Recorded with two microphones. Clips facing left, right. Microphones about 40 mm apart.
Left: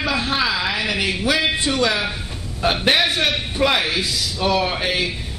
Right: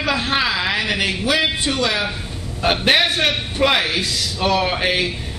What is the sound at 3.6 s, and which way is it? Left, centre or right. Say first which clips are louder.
Speech: right 1 dB; centre.